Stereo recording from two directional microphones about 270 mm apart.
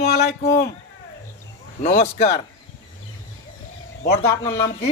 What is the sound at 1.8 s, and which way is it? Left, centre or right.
Speech, left.